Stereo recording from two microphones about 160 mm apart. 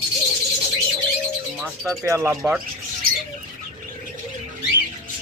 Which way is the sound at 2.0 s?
20° right (ahead or behind).